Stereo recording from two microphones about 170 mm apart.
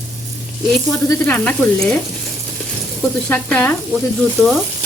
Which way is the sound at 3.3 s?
10° left (ahead or behind).